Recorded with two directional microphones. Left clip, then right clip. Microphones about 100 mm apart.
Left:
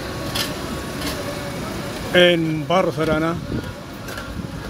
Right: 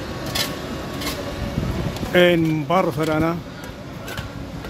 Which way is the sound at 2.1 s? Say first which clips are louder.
Left 1 dB; 30° right (ahead or behind).